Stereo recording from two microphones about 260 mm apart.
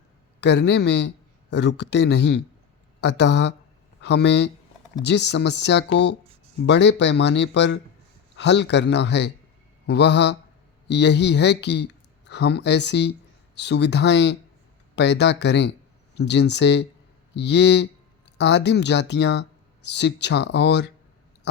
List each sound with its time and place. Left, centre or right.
0.3 s a man's voice: left